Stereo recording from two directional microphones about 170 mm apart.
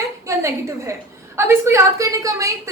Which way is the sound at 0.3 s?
15° right (ahead or behind).